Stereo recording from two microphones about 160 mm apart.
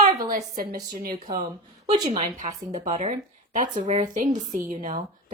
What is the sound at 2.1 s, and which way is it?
A woman's voice, 45° right (ahead or behind).